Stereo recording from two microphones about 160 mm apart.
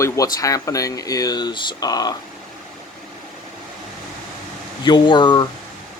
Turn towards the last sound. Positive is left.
turn(degrees=30)  # may be behind; listen again after turning